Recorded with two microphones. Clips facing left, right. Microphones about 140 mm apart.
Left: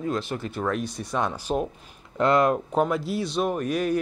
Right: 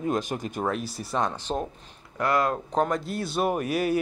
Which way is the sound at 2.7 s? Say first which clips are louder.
Left 2 dB; 5° left (ahead or behind).